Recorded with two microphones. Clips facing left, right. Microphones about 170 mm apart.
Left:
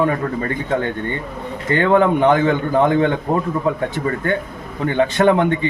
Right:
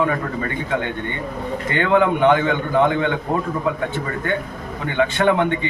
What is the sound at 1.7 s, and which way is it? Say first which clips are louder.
A man's voice: left 3 dB; 40° left (ahead or behind).